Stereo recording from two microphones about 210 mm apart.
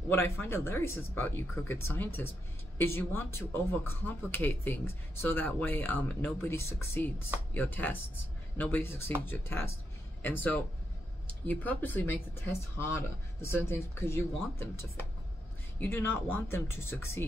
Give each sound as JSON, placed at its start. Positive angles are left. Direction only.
{"t": 0.1, "sound": "speech", "side_deg": 10}